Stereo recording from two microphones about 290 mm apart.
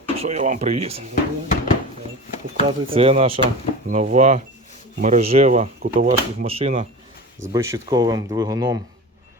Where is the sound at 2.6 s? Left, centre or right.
Centre.